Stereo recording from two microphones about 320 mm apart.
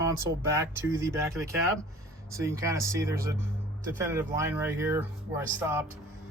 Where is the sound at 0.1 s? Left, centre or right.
Centre.